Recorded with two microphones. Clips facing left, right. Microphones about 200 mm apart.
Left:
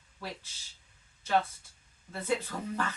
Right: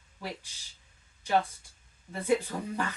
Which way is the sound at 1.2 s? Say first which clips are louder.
Right 1 dB; 15° right (ahead or behind).